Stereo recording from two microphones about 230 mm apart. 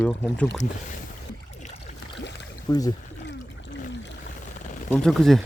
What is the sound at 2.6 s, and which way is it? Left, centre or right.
Speech, centre.